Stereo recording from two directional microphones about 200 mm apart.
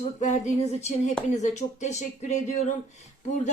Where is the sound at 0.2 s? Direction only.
35° left (ahead or behind).